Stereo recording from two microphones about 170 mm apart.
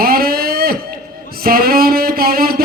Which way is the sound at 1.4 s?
60° right (ahead or behind).